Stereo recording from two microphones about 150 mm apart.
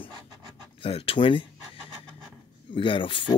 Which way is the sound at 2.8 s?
35° left (ahead or behind).